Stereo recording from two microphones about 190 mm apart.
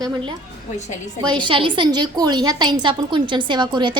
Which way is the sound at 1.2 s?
25° right (ahead or behind).